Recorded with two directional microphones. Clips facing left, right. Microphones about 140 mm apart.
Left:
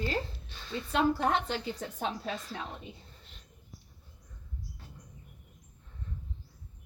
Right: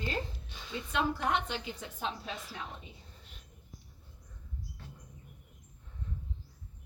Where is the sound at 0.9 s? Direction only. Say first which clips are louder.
Left 4 dB; 35° left (ahead or behind).